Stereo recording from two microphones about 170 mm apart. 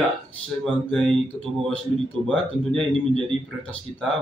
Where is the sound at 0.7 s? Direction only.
5° left (ahead or behind).